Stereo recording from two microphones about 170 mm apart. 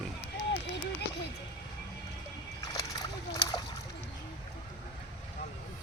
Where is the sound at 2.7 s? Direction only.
20° left (ahead or behind).